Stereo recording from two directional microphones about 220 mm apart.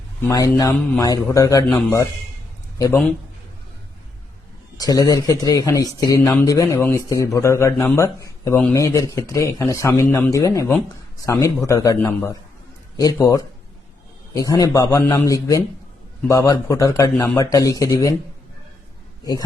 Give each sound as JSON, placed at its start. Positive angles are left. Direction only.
{"t": 0.3, "sound": "speech", "side_deg": 15}
{"t": 4.8, "sound": "speech", "side_deg": 15}